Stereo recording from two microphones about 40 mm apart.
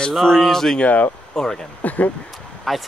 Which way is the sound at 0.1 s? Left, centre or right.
Centre.